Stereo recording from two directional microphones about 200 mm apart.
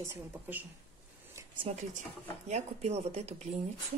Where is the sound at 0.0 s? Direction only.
10° right (ahead or behind).